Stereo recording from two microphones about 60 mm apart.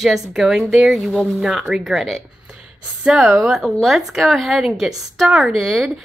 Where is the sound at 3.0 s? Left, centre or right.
Centre.